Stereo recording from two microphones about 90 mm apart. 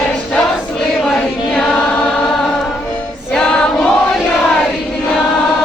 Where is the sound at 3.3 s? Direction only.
10° left (ahead or behind).